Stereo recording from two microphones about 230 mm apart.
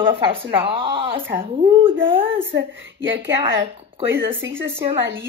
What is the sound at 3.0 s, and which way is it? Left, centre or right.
Speech, centre.